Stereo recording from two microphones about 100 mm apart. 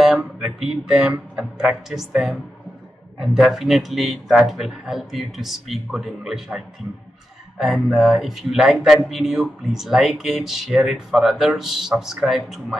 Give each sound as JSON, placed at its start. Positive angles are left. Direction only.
{"t": 0.0, "sound": "speech", "side_deg": -5}